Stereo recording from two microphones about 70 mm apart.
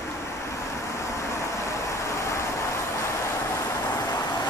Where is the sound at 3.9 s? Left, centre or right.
Left.